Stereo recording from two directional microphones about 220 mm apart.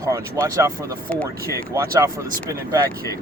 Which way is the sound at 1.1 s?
5° left (ahead or behind).